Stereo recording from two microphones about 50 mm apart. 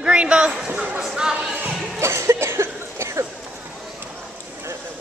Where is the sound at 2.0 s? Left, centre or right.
Right.